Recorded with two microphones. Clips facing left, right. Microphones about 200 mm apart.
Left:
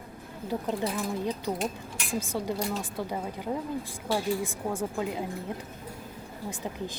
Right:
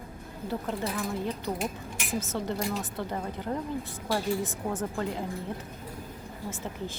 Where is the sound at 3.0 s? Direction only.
10° left (ahead or behind).